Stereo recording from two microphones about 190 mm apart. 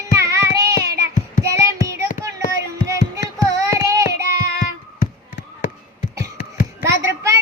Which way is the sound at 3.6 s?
15° right (ahead or behind).